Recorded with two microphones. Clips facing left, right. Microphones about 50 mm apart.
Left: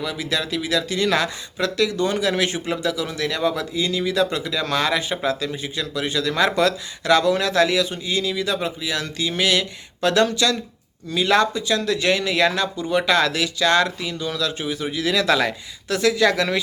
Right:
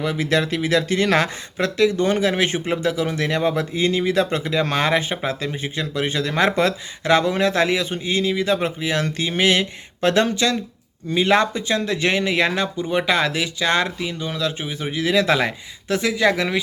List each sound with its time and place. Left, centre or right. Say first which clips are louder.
0.0 s speech: right 5 dB; right; by 16.6 s centre